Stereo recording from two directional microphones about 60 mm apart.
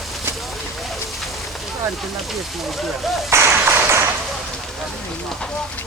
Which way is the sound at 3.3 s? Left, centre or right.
Right.